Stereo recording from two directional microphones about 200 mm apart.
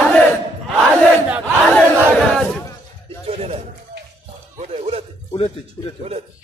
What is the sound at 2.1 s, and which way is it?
Speech, centre (ahead or behind).